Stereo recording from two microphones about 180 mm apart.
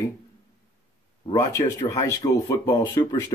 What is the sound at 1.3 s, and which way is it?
Speech, 15° left (ahead or behind).